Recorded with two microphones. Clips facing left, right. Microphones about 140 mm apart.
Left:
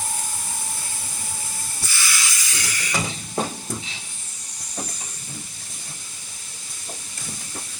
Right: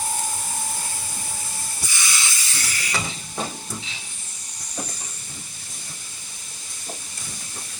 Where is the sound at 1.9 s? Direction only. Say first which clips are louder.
Left 1 dB; 20° right (ahead or behind).